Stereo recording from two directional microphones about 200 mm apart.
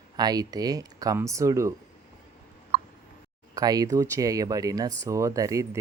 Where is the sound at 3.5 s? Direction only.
20° right (ahead or behind).